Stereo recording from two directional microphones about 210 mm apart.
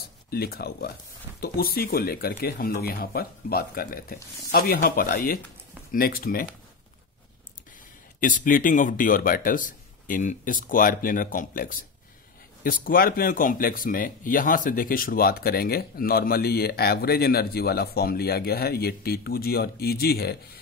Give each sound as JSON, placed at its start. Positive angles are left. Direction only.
{"t": 0.3, "sound": "speech", "side_deg": 45}
{"t": 8.2, "sound": "speech", "side_deg": 40}